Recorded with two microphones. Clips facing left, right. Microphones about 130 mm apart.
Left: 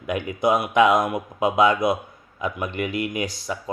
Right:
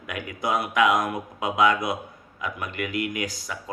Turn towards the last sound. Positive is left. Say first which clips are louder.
# left 4 dB
turn(degrees=25)  # may be behind; listen again after turning